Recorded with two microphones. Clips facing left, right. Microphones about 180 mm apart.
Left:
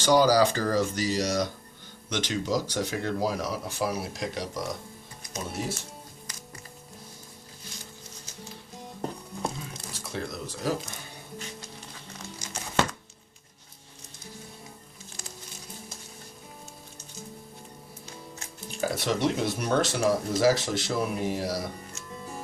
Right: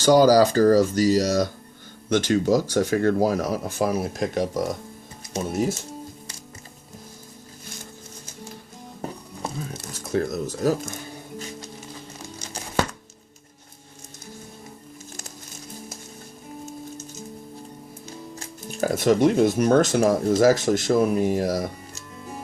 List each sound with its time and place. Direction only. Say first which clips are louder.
0.0 s speech: right 5 dB; 45° right (ahead or behind)
9.0 s a sound: even; 5° right (ahead or behind)
10.0 s music: right 10 dB; 45° right (ahead or behind)
18.3 s speech: right 5 dB; 45° right (ahead or behind)